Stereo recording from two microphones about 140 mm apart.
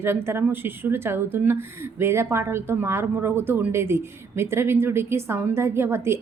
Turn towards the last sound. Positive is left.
turn(degrees=-20)  # may be behind; listen again after turning